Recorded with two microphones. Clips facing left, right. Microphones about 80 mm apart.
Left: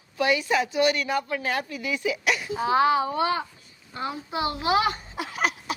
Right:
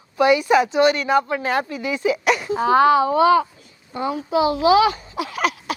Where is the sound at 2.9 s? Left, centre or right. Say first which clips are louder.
Right 8 dB; right.